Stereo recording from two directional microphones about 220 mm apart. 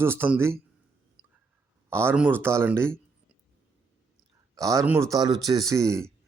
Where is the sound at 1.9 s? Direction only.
10° right (ahead or behind).